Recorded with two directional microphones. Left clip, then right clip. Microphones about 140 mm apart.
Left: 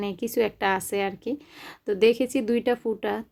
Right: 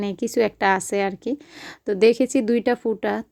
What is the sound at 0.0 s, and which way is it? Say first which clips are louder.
A woman's voice: right 4 dB; 35° right (ahead or behind).